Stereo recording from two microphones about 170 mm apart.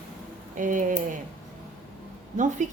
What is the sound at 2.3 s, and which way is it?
Speech, 45° right (ahead or behind).